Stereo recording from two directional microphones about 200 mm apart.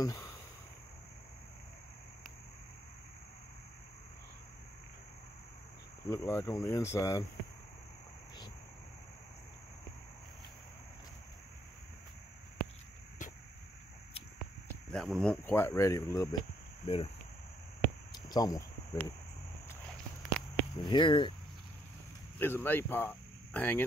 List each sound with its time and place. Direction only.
0.0 s a sound: 15° left (ahead or behind)
6.0 s speech: 15° left (ahead or behind)
13.2 s a sound: 40° left (ahead or behind)
14.9 s speech: 5° left (ahead or behind)
16.8 s speech: 30° left (ahead or behind)
18.1 s cricket: 20° left (ahead or behind)
20.7 s speech: 20° left (ahead or behind)
22.4 s speech: 10° left (ahead or behind)